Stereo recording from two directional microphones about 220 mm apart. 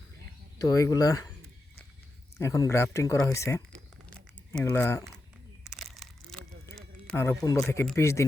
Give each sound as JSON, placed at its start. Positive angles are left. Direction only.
{"t": 0.6, "sound": "speech", "side_deg": 15}
{"t": 2.4, "sound": "speech", "side_deg": 15}
{"t": 5.6, "sound": "a sound", "side_deg": 0}